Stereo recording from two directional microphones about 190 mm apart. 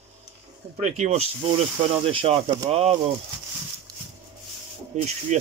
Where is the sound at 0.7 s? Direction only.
40° right (ahead or behind).